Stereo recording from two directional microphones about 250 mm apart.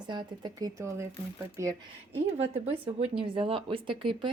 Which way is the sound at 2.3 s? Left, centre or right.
Right.